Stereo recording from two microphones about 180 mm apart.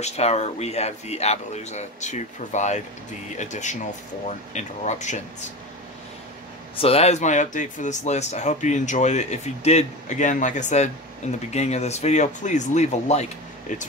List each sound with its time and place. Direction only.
0.0 s speech: 35° left (ahead or behind)
6.8 s speech: 35° left (ahead or behind)